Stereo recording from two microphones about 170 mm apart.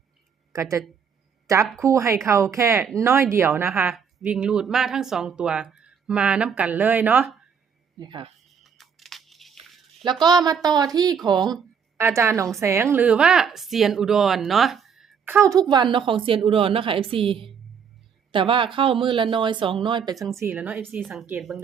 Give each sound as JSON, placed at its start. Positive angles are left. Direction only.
{"t": 0.5, "sound": "speech", "side_deg": -20}
{"t": 7.9, "sound": "speech", "side_deg": -25}
{"t": 8.4, "sound": "music", "side_deg": 0}
{"t": 10.0, "sound": "a woman's voice", "side_deg": -25}
{"t": 15.2, "sound": "a woman's voice", "side_deg": -15}
{"t": 15.7, "sound": "a woman's voice", "side_deg": -25}
{"t": 20.3, "sound": "a woman's voice", "side_deg": -15}